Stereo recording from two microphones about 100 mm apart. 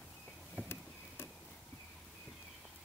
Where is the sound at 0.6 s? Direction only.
25° left (ahead or behind).